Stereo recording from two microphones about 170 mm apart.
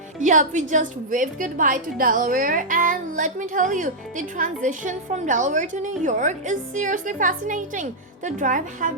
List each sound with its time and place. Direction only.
0.2 s a woman's voice: 45° right (ahead or behind)